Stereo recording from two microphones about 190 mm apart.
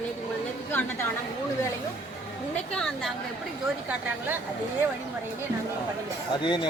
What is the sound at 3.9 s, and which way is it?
Speech, 10° right (ahead or behind).